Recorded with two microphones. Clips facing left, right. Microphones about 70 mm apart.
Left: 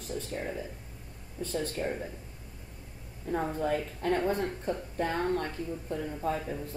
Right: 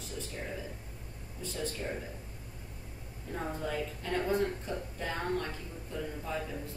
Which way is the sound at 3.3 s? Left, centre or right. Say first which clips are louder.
Left 6 dB; left.